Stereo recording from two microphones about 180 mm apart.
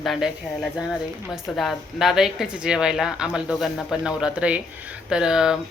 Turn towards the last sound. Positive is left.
turn(degrees=-5)  # may be behind; listen again after turning